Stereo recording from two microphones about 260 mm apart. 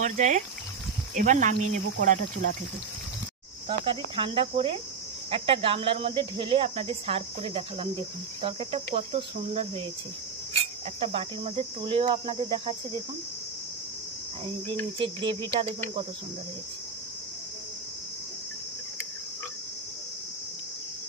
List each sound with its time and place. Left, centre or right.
0.0 s speech: right
3.6 s speech: centre
11.0 s speech: right
15.0 s speech: centre